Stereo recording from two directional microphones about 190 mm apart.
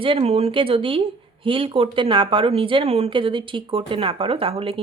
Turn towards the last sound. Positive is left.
turn(degrees=-30)  # may be behind; listen again after turning